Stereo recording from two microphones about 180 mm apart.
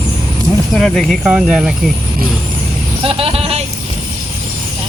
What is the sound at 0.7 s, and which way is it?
Speech, 5° left (ahead or behind).